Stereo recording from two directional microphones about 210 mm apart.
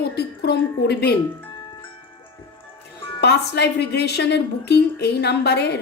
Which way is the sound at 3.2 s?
50° left (ahead or behind).